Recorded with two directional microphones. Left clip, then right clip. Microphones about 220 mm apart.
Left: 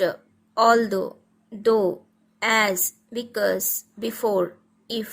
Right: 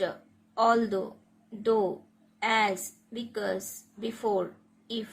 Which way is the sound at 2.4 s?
50° left (ahead or behind).